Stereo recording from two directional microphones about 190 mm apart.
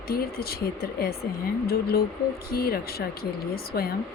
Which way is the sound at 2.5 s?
55° left (ahead or behind).